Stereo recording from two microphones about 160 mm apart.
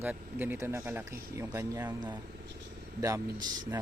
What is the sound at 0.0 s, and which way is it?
Speech, 10° right (ahead or behind).